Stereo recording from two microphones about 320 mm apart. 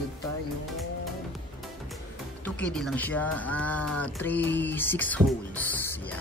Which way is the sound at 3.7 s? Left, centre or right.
Left.